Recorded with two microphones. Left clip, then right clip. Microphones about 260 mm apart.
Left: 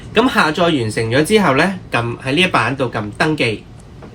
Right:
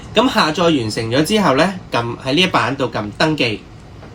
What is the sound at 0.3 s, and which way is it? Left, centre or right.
Speech, centre.